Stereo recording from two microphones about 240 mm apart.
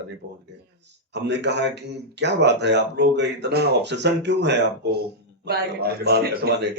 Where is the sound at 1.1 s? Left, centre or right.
Right.